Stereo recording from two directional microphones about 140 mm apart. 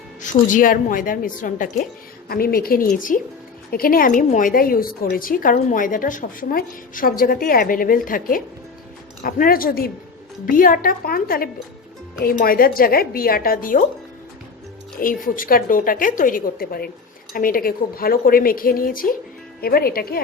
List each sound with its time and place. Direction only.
0.2 s a woman's voice: 70° left (ahead or behind)
2.3 s a woman's voice: 90° left
2.9 s a woman's voice: 75° left (ahead or behind)
3.7 s a woman's voice: 90° left
14.9 s a woman's voice: 80° left